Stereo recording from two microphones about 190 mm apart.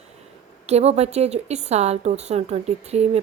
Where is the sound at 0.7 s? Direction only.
35° right (ahead or behind).